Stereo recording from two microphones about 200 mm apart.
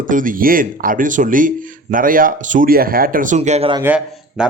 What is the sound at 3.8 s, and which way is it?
Speech, 5° right (ahead or behind).